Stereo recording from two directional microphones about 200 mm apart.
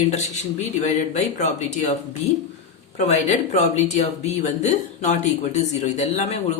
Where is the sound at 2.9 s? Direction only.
35° left (ahead or behind).